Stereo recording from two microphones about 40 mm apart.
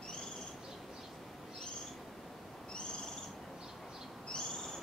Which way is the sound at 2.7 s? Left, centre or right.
Left.